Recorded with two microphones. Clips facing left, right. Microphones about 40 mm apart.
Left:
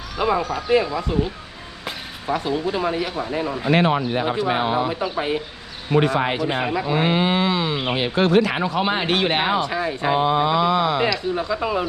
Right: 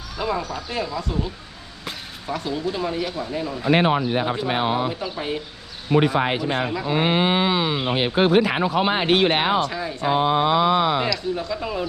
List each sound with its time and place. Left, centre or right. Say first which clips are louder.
0.2 s speech: left 5 dB; left
3.7 s speech: even; centre
4.9 s speech: left 4 dB; left
5.9 s a man's voice: even; centre
6.5 s speech: left 1 dB; centre
6.9 s speech: right 1 dB; right
8.2 s speech: even; centre
9.6 s speech: left 1 dB; centre
10.2 s speech: right 1 dB; right
11.0 s speech: left 3 dB; centre